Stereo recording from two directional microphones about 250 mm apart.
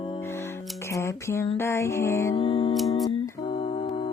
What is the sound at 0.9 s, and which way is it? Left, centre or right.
Music, centre.